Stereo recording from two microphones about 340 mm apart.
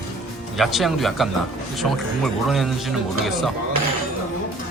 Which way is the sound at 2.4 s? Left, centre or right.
Centre.